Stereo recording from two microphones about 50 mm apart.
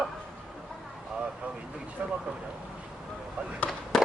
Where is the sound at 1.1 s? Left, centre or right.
Right.